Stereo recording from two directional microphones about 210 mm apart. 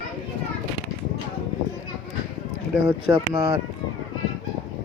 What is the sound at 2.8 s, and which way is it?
Speech, 15° right (ahead or behind).